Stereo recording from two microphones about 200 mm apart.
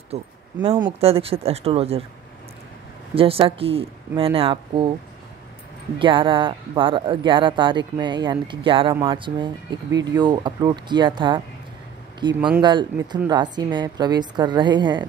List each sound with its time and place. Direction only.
0.1 s speech: 25° right (ahead or behind)
3.2 s speech: 30° right (ahead or behind)
5.9 s speech: 25° right (ahead or behind)
12.4 s speech: 5° right (ahead or behind)
12.6 s speech: 20° right (ahead or behind)